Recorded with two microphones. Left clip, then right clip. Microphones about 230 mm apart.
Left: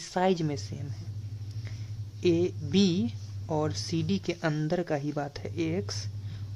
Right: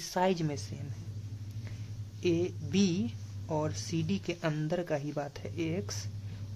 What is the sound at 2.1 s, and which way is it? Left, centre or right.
Speech, centre.